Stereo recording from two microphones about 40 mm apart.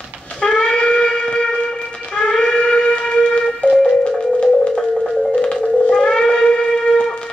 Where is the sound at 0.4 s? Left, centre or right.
Left.